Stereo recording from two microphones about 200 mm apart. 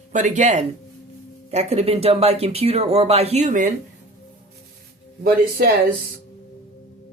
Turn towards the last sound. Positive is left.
turn(degrees=-50)  # may be behind; listen again after turning